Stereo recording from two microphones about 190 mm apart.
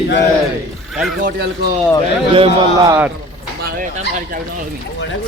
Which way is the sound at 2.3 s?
30° right (ahead or behind).